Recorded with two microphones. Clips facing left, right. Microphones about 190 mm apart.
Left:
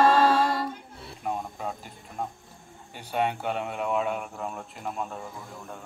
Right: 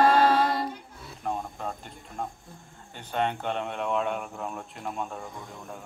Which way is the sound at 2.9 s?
10° left (ahead or behind).